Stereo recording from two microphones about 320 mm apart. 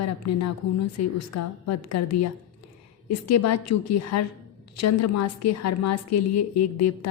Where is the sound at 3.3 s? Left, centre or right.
Left.